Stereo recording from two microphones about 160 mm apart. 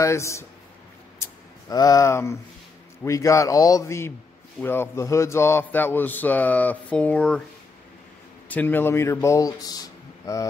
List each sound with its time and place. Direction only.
0.0 s speech: 20° left (ahead or behind)
1.2 s a sound: 25° left (ahead or behind)
3.0 s a man's voice: 20° left (ahead or behind)
8.5 s speech: 10° left (ahead or behind)